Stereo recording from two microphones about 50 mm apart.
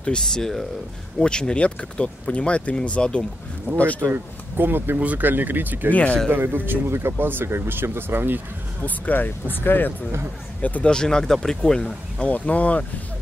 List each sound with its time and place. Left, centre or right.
0.2 s speech: centre; by 4.1 s left
4.1 s speech: right
4.9 s speech: right
5.9 s speech: left
6.2 s speech: right
8.8 s speech: left
10.8 s speech: centre
12.2 s speech: left